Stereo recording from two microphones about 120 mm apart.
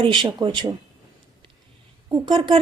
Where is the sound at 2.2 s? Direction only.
40° right (ahead or behind).